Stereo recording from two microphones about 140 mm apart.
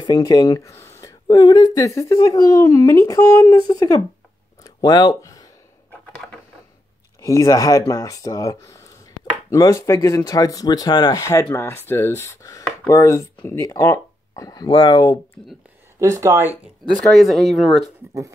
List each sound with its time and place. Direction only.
0.0 s speech: 25° left (ahead or behind)
1.2 s speech: 30° left (ahead or behind)
4.6 s a sound: 30° left (ahead or behind)
5.9 s a sound: 10° left (ahead or behind)
7.2 s speech: 25° left (ahead or behind)
16.0 s speech: 20° right (ahead or behind)
17.1 s speech: centre (ahead or behind)
17.8 s speech: 25° right (ahead or behind)